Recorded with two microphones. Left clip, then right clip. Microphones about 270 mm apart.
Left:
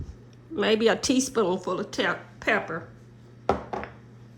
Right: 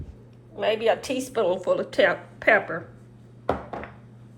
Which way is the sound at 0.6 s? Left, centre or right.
Left.